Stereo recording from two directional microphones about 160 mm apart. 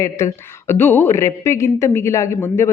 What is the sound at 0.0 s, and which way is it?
A woman's voice, 20° left (ahead or behind).